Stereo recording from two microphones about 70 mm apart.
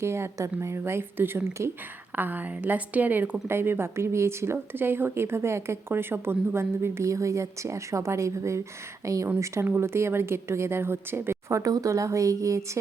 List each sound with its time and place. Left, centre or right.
0.0 s a woman's voice: right
2.1 s a woman's voice: right
9.6 s a woman's voice: right
11.6 s speech: right